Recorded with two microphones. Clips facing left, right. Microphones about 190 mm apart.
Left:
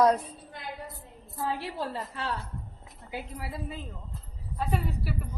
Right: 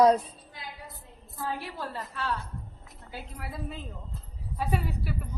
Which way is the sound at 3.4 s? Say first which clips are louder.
Left 1 dB; 5° left (ahead or behind).